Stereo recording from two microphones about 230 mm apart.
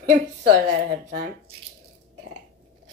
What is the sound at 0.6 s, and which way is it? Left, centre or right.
Speech, right.